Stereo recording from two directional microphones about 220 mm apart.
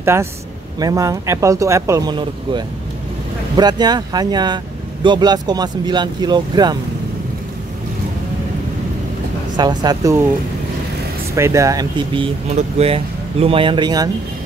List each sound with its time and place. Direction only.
0.0 s speech: 10° right (ahead or behind)
9.6 s speech: 20° right (ahead or behind)
11.3 s speech: 15° right (ahead or behind)
12.5 s speech: 30° right (ahead or behind)